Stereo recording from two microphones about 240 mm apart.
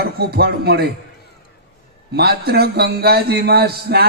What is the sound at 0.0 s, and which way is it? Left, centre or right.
Speech, right.